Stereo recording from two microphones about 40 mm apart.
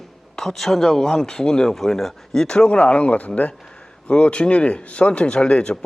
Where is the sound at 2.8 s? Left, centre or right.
Left.